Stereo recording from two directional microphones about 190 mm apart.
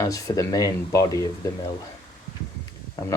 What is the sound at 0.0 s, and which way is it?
Speech, 15° left (ahead or behind).